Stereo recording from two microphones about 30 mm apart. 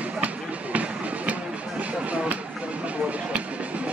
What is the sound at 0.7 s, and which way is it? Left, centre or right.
Music, right.